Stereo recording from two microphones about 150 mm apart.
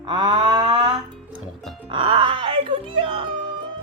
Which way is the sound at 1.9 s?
35° right (ahead or behind).